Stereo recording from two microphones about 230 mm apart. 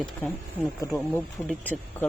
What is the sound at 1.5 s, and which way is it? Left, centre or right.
Speech, centre.